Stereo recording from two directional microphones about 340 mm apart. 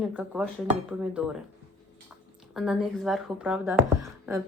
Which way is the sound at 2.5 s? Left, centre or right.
Centre.